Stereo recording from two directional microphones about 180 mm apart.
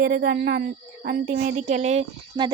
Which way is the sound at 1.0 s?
50° right (ahead or behind).